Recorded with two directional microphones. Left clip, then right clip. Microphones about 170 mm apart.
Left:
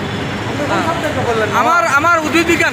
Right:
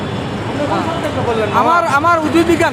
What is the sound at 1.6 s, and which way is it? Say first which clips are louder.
A man's voice: even; 15° right (ahead or behind).